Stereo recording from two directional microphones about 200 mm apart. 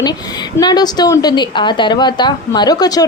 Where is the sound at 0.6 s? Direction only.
20° left (ahead or behind).